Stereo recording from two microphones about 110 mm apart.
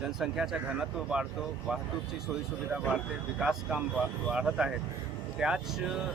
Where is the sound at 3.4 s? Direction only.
5° right (ahead or behind).